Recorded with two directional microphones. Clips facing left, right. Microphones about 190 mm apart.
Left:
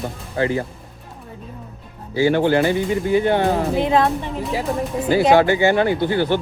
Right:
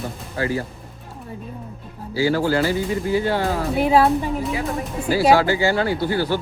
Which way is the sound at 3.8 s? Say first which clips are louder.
Right 1 dB; 5° right (ahead or behind).